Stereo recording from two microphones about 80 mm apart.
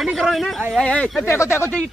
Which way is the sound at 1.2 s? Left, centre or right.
Left.